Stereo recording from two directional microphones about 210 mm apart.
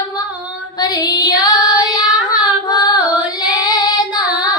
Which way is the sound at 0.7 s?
20° left (ahead or behind).